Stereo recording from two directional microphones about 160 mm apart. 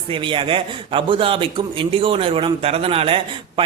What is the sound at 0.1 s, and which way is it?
Speech, 30° right (ahead or behind).